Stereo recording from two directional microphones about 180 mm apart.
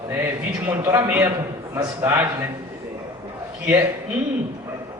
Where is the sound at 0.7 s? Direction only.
10° right (ahead or behind).